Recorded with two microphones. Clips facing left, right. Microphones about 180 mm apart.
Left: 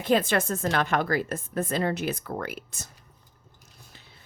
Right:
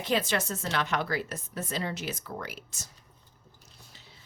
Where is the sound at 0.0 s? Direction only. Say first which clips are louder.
Left 5 dB; 50° left (ahead or behind).